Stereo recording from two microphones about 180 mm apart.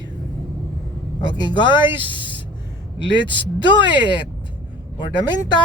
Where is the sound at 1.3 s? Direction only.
25° left (ahead or behind).